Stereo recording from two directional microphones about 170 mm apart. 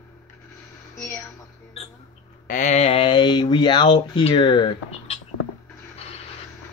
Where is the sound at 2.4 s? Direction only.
50° left (ahead or behind).